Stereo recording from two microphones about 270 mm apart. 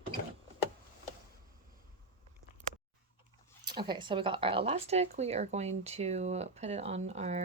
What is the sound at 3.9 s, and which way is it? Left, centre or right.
Speech, centre.